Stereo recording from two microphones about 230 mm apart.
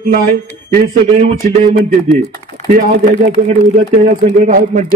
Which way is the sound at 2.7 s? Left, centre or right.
Right.